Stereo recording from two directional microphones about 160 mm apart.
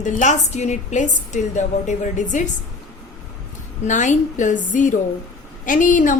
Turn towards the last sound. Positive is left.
turn(degrees=55)  # may be behind; listen again after turning